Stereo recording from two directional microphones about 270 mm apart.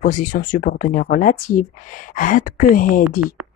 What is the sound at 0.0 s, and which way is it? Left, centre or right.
Speech, left.